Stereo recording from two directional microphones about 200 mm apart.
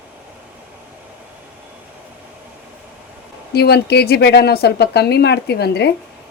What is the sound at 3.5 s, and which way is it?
A woman's voice, 55° left (ahead or behind).